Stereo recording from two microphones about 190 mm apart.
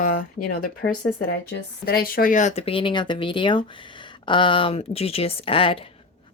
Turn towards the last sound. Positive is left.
turn(degrees=30)  # may be behind; listen again after turning